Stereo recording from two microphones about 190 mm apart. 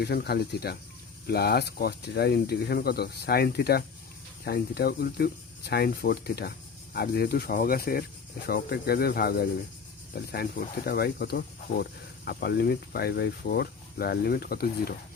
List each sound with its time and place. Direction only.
0.0 s speech: 55° left (ahead or behind)